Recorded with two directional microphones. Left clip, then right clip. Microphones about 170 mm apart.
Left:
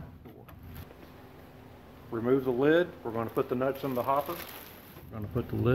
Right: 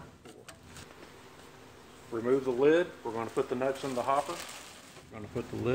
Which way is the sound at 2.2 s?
30° left (ahead or behind).